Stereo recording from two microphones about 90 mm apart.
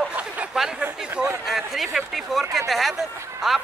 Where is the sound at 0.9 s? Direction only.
10° right (ahead or behind).